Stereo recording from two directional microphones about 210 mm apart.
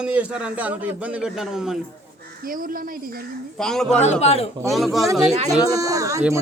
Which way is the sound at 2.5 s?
40° right (ahead or behind).